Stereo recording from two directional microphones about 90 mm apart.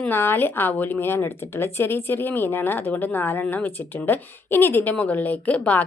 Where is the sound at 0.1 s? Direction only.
25° left (ahead or behind).